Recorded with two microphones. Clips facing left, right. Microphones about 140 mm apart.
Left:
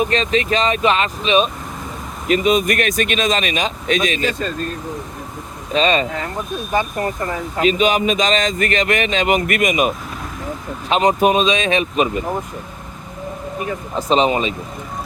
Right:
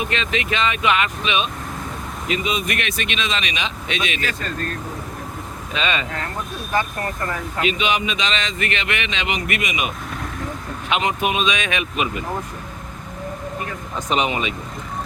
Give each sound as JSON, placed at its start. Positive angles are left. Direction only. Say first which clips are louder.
{"t": 0.0, "sound": "speech", "louder": "left 6 dB", "side_deg": 35}
{"t": 2.2, "sound": "a man's voice", "louder": "left 8 dB", "side_deg": 45}
{"t": 5.7, "sound": "speech", "louder": "left 8 dB", "side_deg": 35}
{"t": 6.7, "sound": "speech", "louder": "left 3 dB", "side_deg": 20}
{"t": 7.6, "sound": "a man's voice", "louder": "left 6 dB", "side_deg": 40}
{"t": 13.9, "sound": "speech", "louder": "left 6 dB", "side_deg": 30}